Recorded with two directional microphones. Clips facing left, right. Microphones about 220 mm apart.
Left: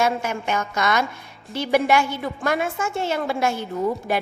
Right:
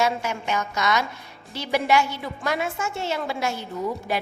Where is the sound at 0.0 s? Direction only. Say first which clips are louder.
Left 2 dB; 50° left (ahead or behind).